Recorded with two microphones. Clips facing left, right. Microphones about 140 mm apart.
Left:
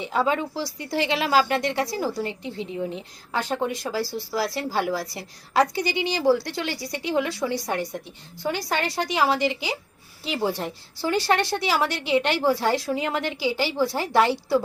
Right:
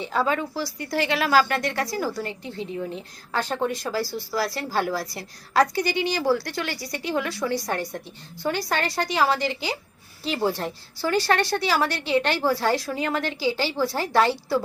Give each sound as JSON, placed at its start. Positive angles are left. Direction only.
{"t": 0.0, "sound": "a woman's voice", "side_deg": 20}